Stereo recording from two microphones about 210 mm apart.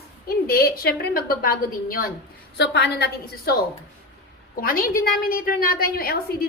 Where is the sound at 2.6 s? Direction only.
55° left (ahead or behind).